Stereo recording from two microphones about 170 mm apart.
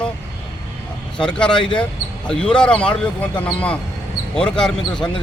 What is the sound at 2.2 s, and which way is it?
Speech, 5° left (ahead or behind).